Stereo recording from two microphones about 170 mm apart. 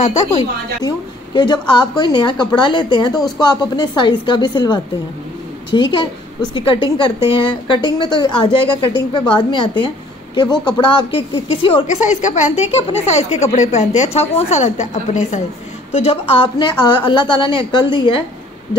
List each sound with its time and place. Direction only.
0.0 s speech: 40° left (ahead or behind)
0.8 s a woman's voice: 25° left (ahead or behind)
11.9 s a woman's voice: 45° left (ahead or behind); by 18.2 s 30° left (ahead or behind)